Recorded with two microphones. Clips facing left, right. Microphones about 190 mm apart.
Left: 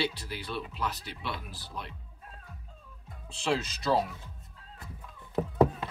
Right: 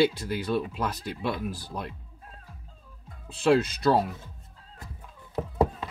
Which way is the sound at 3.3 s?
55° right (ahead or behind).